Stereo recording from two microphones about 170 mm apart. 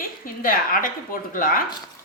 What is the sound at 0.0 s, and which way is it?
A woman's voice, 55° left (ahead or behind).